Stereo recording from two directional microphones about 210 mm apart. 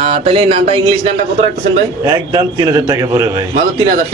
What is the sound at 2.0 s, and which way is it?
A man's voice, 15° right (ahead or behind).